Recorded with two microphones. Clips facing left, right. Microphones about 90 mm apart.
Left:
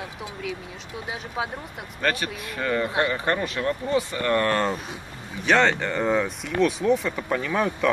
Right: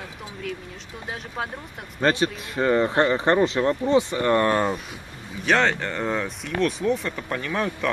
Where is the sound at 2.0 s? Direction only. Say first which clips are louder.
Right 5 dB; 25° right (ahead or behind).